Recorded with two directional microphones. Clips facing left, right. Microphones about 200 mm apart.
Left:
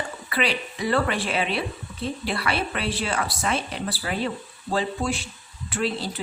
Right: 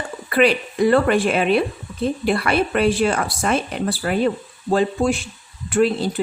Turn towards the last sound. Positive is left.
turn(degrees=-50)  # may be behind; listen again after turning